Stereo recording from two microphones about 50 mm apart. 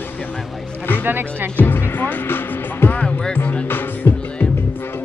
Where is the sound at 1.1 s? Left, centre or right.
Right.